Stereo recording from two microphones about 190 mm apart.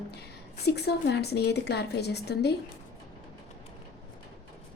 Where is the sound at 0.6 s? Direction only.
60° left (ahead or behind).